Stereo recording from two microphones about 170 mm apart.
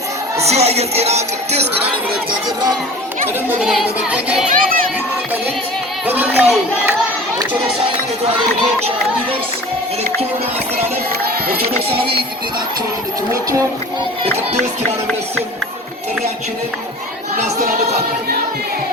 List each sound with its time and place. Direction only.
0.3 s music: 40° right (ahead or behind)
3.6 s music: 5° right (ahead or behind)
4.4 s speech: 55° right (ahead or behind)
6.1 s speech: 10° right (ahead or behind)
11.4 s speech: 65° right (ahead or behind)
17.3 s choir: 45° right (ahead or behind)